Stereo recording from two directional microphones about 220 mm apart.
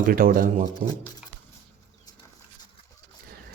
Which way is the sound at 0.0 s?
40° right (ahead or behind).